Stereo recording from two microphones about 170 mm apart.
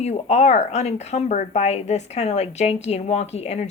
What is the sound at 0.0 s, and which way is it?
Speech, 40° left (ahead or behind).